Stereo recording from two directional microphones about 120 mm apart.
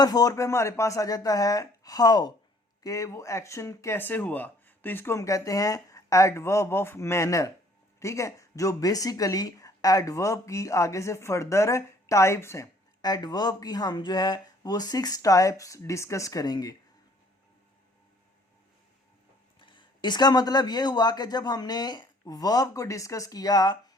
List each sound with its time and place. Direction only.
0.0 s speech: 30° left (ahead or behind)
13.0 s speech: 35° left (ahead or behind)
19.5 s speech: 45° left (ahead or behind)